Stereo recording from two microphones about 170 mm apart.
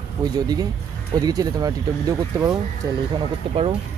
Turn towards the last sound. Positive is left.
turn(degrees=-35)  # may be behind; listen again after turning